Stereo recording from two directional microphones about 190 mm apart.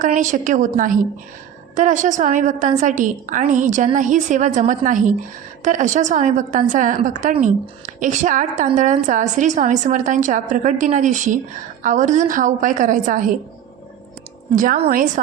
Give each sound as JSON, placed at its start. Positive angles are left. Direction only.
{"t": 0.0, "sound": "a woman's voice", "side_deg": -40}
{"t": 14.5, "sound": "a woman's voice", "side_deg": -45}